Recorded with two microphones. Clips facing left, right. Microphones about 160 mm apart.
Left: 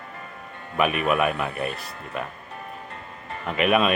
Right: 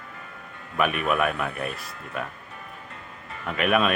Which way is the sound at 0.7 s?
5° left (ahead or behind).